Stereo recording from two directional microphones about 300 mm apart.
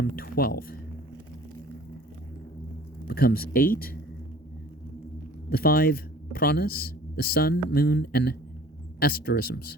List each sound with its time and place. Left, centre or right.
0.0 s speech: left
3.1 s speech: left
5.5 s speech: left